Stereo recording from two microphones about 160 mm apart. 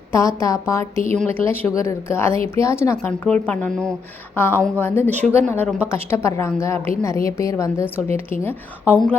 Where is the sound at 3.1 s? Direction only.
5° left (ahead or behind).